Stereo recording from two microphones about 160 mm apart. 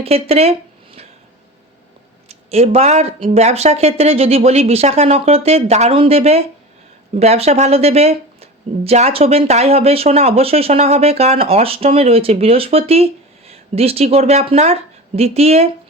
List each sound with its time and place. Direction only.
0.0 s speech: 40° right (ahead or behind)
2.3 s a woman's voice: 40° right (ahead or behind)